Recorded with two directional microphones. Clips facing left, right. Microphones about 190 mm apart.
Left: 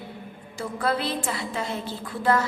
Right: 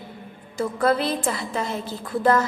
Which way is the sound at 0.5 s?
45° right (ahead or behind).